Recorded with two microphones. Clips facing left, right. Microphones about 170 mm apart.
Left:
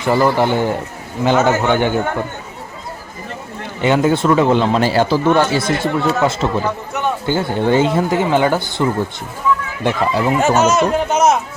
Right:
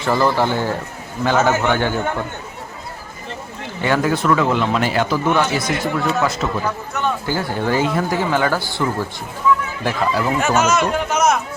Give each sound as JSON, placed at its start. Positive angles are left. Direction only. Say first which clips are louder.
{"t": 0.0, "sound": "a man's voice", "louder": "left 3 dB", "side_deg": 15}
{"t": 3.8, "sound": "speech", "louder": "left 4 dB", "side_deg": 20}